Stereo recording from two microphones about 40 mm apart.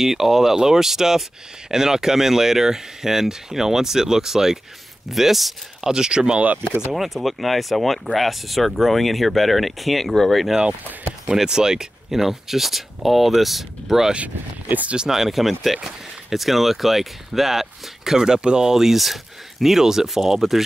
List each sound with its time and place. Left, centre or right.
0.0 s speech: centre
5.9 s speech: centre
6.9 s speech: centre
11.2 s speech: centre
14.1 s speech: right
15.0 s speech: centre